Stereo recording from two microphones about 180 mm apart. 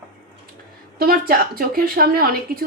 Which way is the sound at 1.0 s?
55° right (ahead or behind).